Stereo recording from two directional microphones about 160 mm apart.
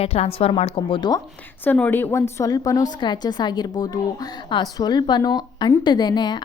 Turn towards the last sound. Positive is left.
turn(degrees=25)  # may be behind; listen again after turning